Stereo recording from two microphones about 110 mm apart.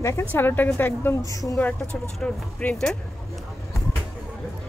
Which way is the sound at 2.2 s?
10° left (ahead or behind).